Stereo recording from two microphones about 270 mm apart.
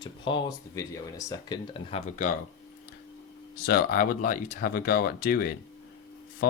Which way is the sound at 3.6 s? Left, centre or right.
Left.